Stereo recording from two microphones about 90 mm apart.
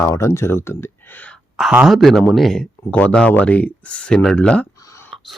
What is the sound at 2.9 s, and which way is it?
Speech, 15° left (ahead or behind).